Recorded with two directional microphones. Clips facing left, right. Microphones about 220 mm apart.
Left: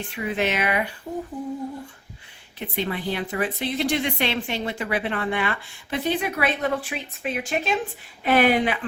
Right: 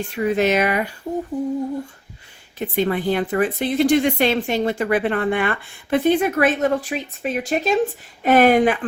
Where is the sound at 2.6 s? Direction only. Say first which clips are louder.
Right 7 dB; 45° right (ahead or behind).